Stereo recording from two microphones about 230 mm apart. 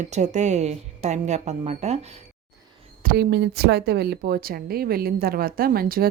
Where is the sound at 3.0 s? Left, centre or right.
Right.